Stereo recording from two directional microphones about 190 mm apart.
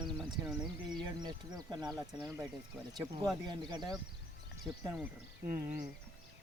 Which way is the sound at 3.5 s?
25° right (ahead or behind).